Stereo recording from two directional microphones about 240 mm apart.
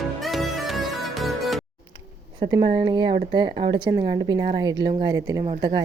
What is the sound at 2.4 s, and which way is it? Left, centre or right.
A woman's voice, centre.